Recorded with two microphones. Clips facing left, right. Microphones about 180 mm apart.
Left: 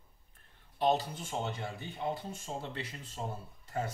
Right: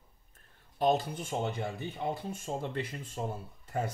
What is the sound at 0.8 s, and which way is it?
Speech, 50° right (ahead or behind).